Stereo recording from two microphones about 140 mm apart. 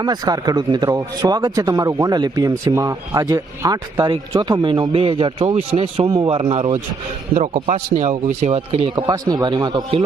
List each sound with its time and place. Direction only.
0.0 s a man's voice: 30° right (ahead or behind); by 6.7 s 45° right (ahead or behind)
7.3 s a man's voice: 60° right (ahead or behind)
8.3 s speech: 50° right (ahead or behind)
9.0 s speech: 30° right (ahead or behind)